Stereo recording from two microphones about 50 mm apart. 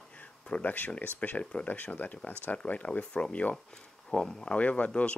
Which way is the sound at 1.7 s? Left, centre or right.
Left.